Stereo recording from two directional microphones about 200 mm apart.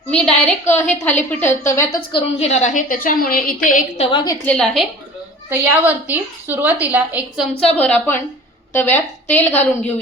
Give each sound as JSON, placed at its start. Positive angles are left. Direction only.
{"t": 0.1, "sound": "a woman's voice", "side_deg": 5}
{"t": 2.4, "sound": "a woman's voice", "side_deg": 35}
{"t": 4.4, "sound": "a woman's voice", "side_deg": 5}
{"t": 5.5, "sound": "a woman's voice", "side_deg": -10}
{"t": 7.8, "sound": "a woman's voice", "side_deg": 5}